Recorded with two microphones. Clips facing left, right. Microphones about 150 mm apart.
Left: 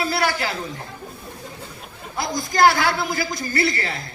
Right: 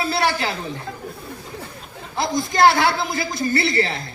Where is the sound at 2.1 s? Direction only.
25° right (ahead or behind).